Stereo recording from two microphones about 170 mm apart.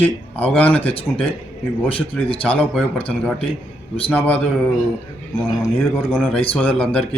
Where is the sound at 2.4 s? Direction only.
10° left (ahead or behind).